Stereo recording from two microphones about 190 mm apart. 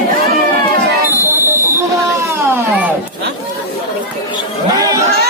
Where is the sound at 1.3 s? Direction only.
15° right (ahead or behind).